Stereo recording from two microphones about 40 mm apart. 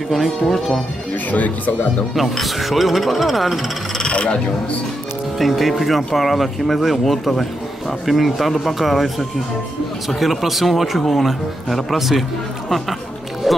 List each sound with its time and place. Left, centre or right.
0.1 s speech: centre
2.1 s speech: centre
4.1 s a sound: left
5.4 s speech: centre
13.5 s music: centre